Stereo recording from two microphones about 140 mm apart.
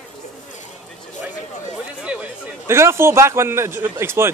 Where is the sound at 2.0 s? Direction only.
10° right (ahead or behind).